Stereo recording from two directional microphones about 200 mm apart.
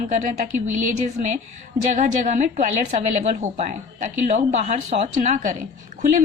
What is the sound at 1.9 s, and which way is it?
Speech, 40° right (ahead or behind).